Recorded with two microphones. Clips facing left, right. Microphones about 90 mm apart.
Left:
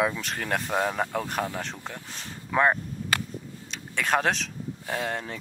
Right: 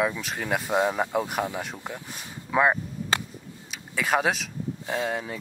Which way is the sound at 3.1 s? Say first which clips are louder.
Right 1 dB; 25° right (ahead or behind).